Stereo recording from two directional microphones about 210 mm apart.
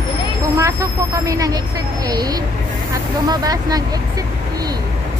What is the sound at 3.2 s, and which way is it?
Speech, 20° right (ahead or behind).